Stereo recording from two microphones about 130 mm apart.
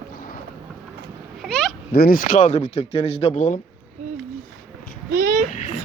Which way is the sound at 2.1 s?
90° left.